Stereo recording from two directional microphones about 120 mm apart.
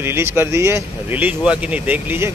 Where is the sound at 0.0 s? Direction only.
20° right (ahead or behind).